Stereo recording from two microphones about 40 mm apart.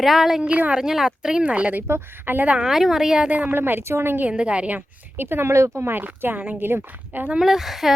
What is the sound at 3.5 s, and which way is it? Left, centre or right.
Speech, right.